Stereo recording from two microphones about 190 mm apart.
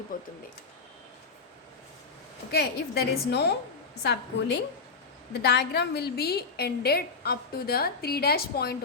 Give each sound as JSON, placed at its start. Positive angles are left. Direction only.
{"t": 0.1, "sound": "speech", "side_deg": 45}
{"t": 2.5, "sound": "a woman's voice", "side_deg": 60}